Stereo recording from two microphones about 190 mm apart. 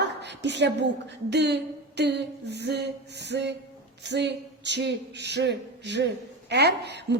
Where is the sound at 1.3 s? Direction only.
60° right (ahead or behind).